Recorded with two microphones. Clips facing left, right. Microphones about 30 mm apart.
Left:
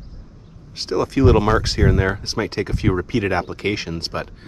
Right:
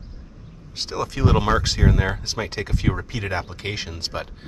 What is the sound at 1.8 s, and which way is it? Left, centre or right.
Speech, left.